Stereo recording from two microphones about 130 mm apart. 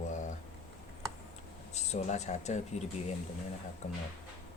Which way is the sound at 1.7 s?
55° left (ahead or behind).